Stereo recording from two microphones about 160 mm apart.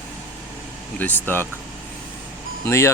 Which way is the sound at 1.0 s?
10° left (ahead or behind).